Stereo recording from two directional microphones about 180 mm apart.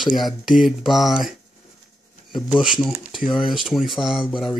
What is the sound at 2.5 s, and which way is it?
Speech, 5° right (ahead or behind).